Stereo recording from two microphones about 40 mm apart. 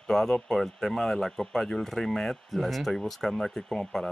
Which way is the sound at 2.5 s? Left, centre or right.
Centre.